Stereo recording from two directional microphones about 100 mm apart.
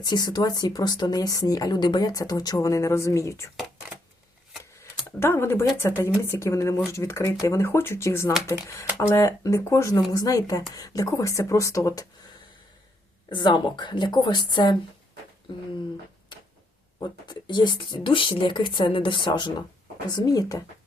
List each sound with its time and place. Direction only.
0.0 s speech: 45° left (ahead or behind)
4.8 s a sound: 25° left (ahead or behind)
5.8 s speech: 30° left (ahead or behind)
13.3 s speech: 50° left (ahead or behind)
17.0 s speech: 50° left (ahead or behind)